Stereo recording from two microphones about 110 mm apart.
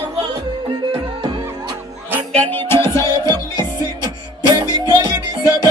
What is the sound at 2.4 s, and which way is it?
Music, 15° left (ahead or behind).